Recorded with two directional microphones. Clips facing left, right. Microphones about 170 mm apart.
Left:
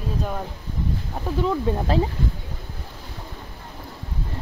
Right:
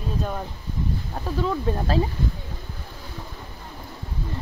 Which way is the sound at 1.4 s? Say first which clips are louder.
Left 2 dB; 20° left (ahead or behind).